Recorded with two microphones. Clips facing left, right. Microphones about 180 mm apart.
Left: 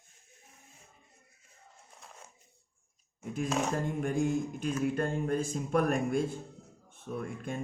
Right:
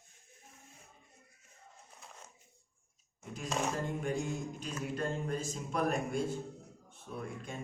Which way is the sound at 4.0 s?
50° left (ahead or behind).